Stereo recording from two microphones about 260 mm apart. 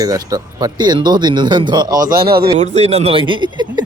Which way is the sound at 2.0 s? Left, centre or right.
Right.